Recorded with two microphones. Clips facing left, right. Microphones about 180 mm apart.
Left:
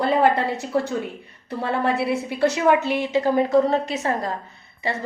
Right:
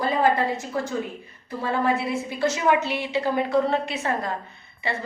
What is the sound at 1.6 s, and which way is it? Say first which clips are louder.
A woman's voice: left 1 dB; 65° left (ahead or behind).